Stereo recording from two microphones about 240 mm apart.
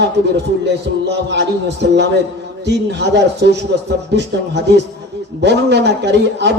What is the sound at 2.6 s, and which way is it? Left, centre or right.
A man's voice, right.